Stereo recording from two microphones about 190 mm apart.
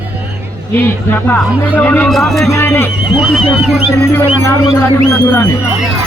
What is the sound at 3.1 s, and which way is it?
Speech, centre (ahead or behind).